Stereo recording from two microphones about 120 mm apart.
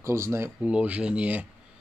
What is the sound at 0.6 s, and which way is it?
Speech, 10° right (ahead or behind).